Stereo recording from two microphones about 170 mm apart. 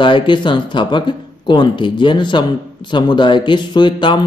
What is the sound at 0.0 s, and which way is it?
A man's voice, 30° left (ahead or behind).